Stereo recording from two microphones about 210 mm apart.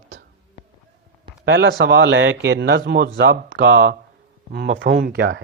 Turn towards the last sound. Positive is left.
turn(degrees=-55)  # may be behind; listen again after turning